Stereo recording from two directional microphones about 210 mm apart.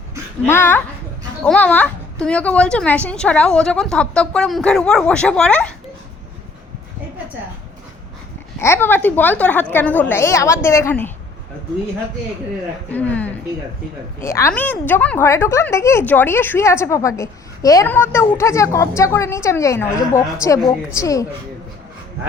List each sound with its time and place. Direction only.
0.4 s a woman's voice: 10° left (ahead or behind)
8.5 s a woman's voice: 10° left (ahead or behind)
12.9 s a woman's voice: 5° left (ahead or behind)